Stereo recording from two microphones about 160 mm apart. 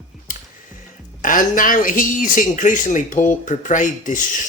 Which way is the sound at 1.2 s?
55° left (ahead or behind).